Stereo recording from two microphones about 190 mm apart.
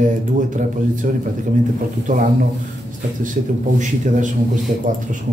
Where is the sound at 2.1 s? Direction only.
45° right (ahead or behind).